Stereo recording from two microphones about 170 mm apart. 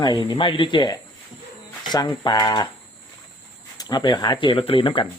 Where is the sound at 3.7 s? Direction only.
25° left (ahead or behind).